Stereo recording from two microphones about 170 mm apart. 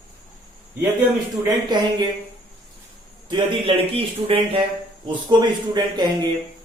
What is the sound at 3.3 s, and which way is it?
A man's voice, 30° right (ahead or behind).